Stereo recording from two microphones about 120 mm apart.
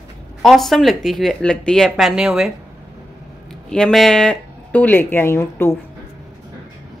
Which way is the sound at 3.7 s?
5° left (ahead or behind).